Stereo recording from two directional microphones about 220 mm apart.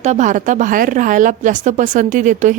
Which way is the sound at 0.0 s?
30° right (ahead or behind).